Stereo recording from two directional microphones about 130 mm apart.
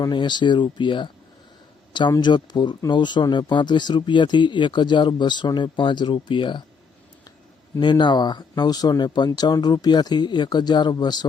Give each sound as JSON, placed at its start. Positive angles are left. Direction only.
{"t": 0.0, "sound": "speech", "side_deg": 35}
{"t": 7.8, "sound": "speech", "side_deg": 35}